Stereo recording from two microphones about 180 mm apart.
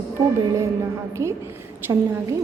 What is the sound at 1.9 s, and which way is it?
Speech, 15° right (ahead or behind).